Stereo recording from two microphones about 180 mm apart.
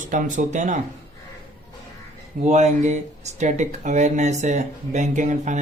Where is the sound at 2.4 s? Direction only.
40° right (ahead or behind).